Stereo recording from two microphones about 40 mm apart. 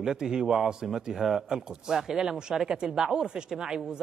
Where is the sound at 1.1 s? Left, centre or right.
Centre.